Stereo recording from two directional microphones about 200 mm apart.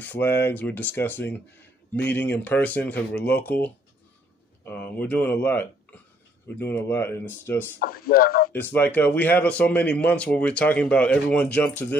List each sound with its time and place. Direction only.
0.0 s speech: 10° left (ahead or behind)
7.8 s speech: 45° left (ahead or behind)
8.5 s speech: 10° left (ahead or behind)